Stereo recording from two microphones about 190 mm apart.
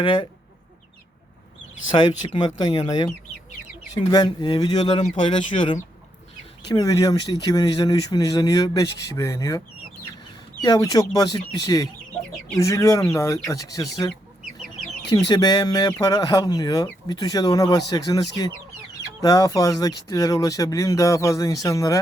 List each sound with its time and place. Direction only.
0.0 s speech: 25° left (ahead or behind)
1.9 s speech: 25° left (ahead or behind)
10.6 s speech: 20° left (ahead or behind)
15.3 s speech: 20° left (ahead or behind)